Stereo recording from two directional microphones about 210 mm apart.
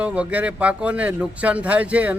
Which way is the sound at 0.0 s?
5° right (ahead or behind).